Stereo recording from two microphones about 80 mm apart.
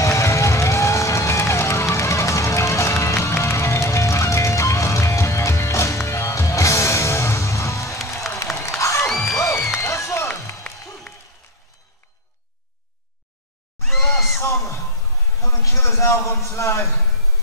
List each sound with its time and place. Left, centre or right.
0.0 s music: left
8.6 s crowd: left
9.8 s music: left
13.8 s a sound: centre
14.4 s music: left
15.4 s a sound: left